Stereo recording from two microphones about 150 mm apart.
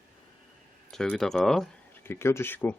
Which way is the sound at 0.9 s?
5° left (ahead or behind).